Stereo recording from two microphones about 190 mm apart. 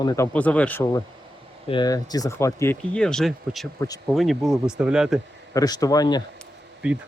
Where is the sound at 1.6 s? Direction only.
25° left (ahead or behind); by 5.1 s 5° right (ahead or behind).